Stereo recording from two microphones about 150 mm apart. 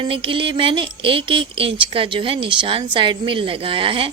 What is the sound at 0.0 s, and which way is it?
Speech, 35° right (ahead or behind).